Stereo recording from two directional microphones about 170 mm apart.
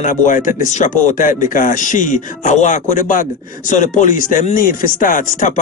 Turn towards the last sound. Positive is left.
turn(degrees=50)  # may be behind; listen again after turning